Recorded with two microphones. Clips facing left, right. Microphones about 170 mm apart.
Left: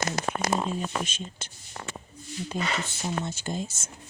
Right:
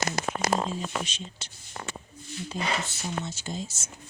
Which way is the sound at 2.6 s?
55° left (ahead or behind).